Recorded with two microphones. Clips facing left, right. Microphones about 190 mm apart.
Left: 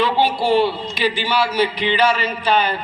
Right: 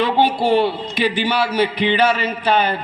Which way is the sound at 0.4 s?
55° right (ahead or behind).